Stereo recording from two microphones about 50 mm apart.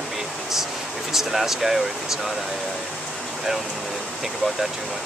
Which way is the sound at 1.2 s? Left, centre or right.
Centre.